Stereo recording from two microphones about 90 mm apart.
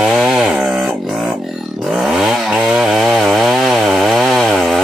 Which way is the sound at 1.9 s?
5° right (ahead or behind).